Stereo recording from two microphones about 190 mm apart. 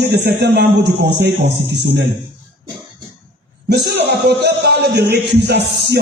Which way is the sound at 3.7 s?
55° right (ahead or behind).